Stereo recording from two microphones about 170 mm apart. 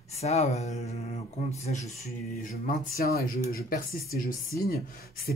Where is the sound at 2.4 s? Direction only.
55° left (ahead or behind).